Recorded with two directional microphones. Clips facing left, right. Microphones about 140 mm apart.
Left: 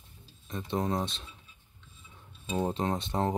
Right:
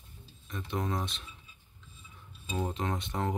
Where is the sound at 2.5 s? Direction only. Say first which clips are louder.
Left 4 dB; 30° left (ahead or behind).